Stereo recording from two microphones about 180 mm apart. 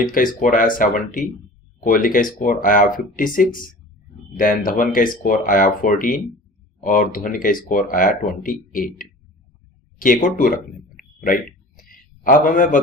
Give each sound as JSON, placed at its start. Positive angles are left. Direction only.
{"t": 0.0, "sound": "speech", "side_deg": 50}
{"t": 10.2, "sound": "speech", "side_deg": 50}
{"t": 11.8, "sound": "a sound", "side_deg": 50}